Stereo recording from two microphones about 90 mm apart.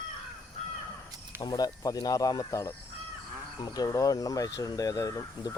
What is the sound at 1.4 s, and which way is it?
Speech, 45° left (ahead or behind).